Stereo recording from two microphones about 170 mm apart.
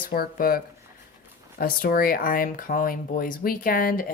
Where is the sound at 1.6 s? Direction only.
60° left (ahead or behind).